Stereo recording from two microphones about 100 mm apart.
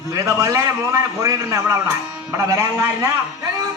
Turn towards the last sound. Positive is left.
turn(degrees=-30)  # may be behind; listen again after turning